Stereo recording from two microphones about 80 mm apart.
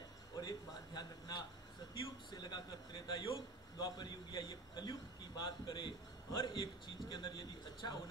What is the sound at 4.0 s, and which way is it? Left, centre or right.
A man's voice, left.